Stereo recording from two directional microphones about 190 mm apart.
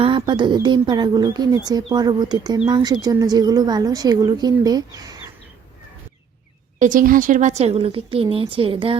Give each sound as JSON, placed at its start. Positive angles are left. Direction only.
{"t": 0.0, "sound": "speech", "side_deg": -25}
{"t": 6.7, "sound": "a woman's voice", "side_deg": -45}